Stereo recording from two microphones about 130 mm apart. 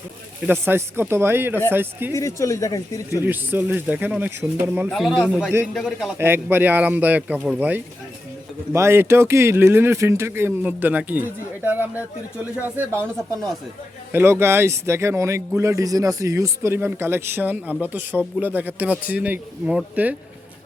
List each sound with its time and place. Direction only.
0.6 s speech: 20° right (ahead or behind)
2.1 s speech: 25° left (ahead or behind)
3.2 s speech: 15° right (ahead or behind)
4.9 s a man's voice: centre (ahead or behind)
6.1 s a man's voice: 15° right (ahead or behind)
8.7 s speech: 20° right (ahead or behind)
13.1 s a man's voice: centre (ahead or behind)
14.1 s speech: 15° right (ahead or behind)